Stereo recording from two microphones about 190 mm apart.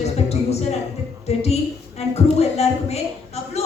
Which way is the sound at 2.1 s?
35° left (ahead or behind).